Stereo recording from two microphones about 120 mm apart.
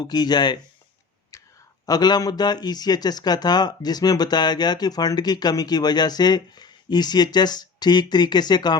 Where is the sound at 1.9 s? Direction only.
35° left (ahead or behind).